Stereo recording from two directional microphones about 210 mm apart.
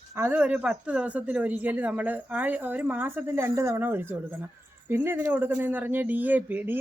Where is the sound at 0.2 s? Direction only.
10° right (ahead or behind).